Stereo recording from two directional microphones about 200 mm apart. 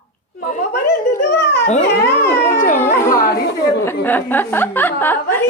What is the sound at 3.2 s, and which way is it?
Speech, 55° left (ahead or behind).